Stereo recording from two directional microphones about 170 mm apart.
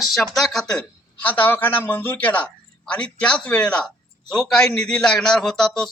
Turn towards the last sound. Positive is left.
turn(degrees=5)  # may be behind; listen again after turning